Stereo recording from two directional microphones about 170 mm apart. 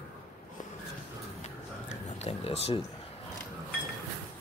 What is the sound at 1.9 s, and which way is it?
Oink, 40° left (ahead or behind).